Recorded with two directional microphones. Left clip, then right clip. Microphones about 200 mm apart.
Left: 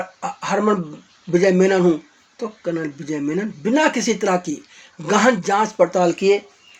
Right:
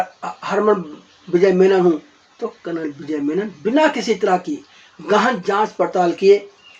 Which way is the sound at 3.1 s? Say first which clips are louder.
Right 4 dB; 35° left (ahead or behind).